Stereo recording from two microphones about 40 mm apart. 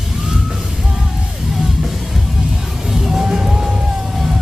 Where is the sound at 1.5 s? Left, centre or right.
Centre.